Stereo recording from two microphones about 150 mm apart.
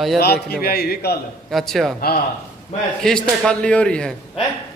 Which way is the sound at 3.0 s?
5° left (ahead or behind).